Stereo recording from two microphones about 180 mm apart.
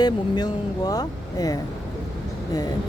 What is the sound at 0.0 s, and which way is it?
Speech, 20° left (ahead or behind).